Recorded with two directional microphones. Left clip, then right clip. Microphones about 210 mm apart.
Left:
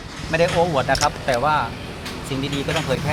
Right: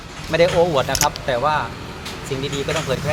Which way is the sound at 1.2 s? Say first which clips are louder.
Even; centre (ahead or behind).